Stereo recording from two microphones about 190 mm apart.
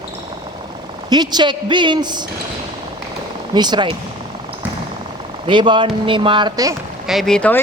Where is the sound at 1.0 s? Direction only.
20° right (ahead or behind).